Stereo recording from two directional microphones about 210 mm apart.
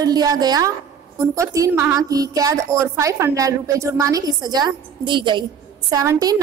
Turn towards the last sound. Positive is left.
turn(degrees=-20)  # may be behind; listen again after turning